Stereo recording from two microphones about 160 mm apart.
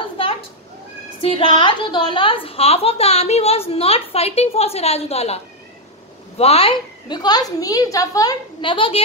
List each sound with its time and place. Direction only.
1.2 s a woman's voice: 35° left (ahead or behind)